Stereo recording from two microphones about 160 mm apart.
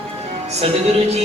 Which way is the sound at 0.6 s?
40° right (ahead or behind).